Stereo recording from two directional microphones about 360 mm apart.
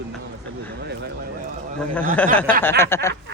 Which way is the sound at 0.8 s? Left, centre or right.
Right.